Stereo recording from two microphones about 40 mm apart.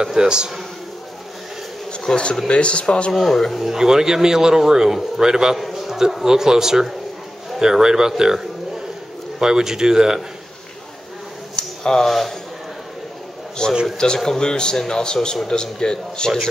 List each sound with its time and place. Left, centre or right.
0.0 s a man's voice: centre
1.9 s bee: left
2.4 s speech: left
3.1 s speech: centre
3.7 s a man's voice: centre
5.6 s a sound: centre
6.2 s a man's voice: centre
9.4 s a man's voice: centre
11.5 s a sound: centre
12.1 s speech: centre
13.6 s speech: centre